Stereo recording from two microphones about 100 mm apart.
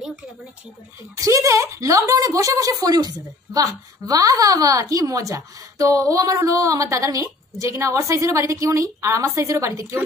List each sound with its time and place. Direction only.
1.1 s a woman's voice: 35° right (ahead or behind)